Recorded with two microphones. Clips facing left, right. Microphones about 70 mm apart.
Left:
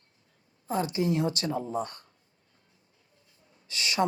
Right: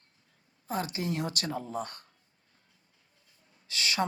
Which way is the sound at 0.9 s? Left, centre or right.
Right.